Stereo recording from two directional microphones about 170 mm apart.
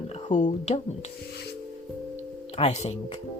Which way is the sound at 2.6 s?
40° left (ahead or behind).